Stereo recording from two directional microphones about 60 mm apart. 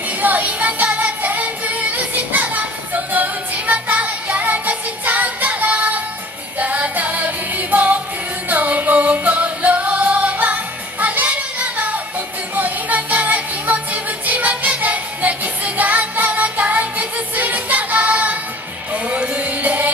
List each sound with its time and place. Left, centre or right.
0.2 s music: right